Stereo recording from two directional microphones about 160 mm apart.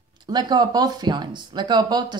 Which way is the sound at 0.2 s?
25° right (ahead or behind).